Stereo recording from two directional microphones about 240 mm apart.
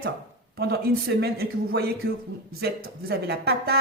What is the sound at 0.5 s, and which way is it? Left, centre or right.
Speech, right.